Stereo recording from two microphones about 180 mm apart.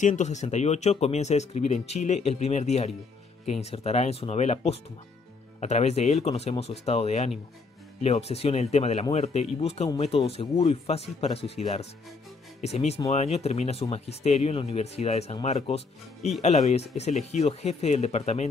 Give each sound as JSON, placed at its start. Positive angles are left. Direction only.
{"t": 0.0, "sound": "speech", "side_deg": 40}